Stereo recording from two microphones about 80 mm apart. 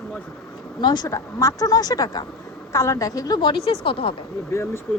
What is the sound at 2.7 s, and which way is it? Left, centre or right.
Speech, left.